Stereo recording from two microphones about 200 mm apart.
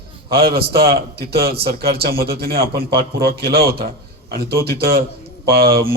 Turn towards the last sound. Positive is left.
turn(degrees=-50)  # may be behind; listen again after turning